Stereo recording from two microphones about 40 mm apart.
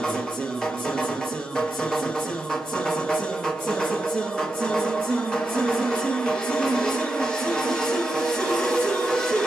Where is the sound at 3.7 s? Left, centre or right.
Centre.